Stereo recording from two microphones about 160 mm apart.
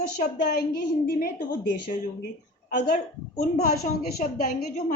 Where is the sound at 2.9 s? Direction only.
45° left (ahead or behind).